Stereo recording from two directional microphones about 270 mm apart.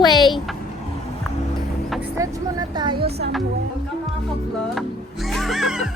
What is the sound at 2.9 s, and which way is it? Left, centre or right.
Speech, right.